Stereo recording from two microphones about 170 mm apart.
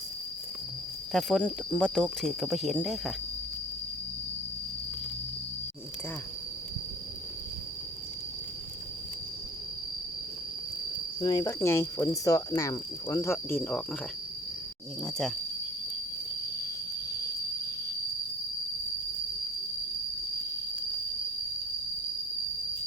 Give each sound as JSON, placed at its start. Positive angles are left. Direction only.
{"t": 1.1, "sound": "speech", "side_deg": 5}
{"t": 11.2, "sound": "speech", "side_deg": 25}